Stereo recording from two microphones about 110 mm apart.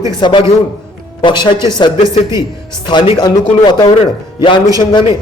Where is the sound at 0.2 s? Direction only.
45° left (ahead or behind).